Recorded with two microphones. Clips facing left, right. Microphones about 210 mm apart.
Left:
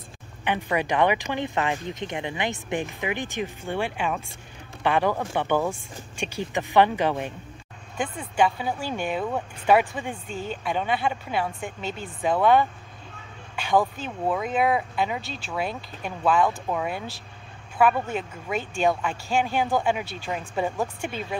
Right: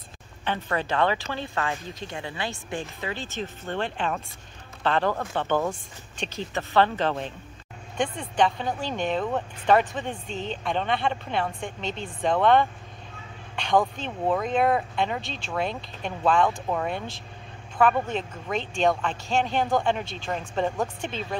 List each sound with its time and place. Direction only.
0.5 s speech: 15° left (ahead or behind)